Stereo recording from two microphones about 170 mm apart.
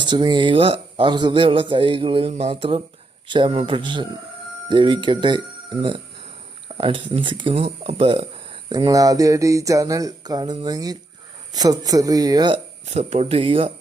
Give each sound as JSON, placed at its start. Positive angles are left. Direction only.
{"t": 0.0, "sound": "speech", "side_deg": -25}
{"t": 6.7, "sound": "speech", "side_deg": -30}
{"t": 8.7, "sound": "speech", "side_deg": -25}
{"t": 12.8, "sound": "speech", "side_deg": -40}